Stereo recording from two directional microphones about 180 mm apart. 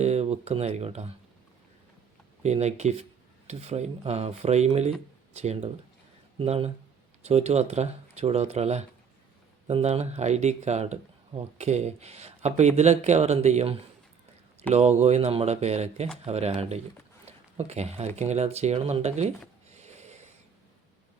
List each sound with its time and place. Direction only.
0.0 s speech: 35° right (ahead or behind)
2.4 s speech: 40° right (ahead or behind)
19.7 s a sound: 40° right (ahead or behind)